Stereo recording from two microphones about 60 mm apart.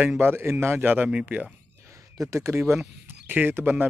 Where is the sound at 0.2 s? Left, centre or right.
Right.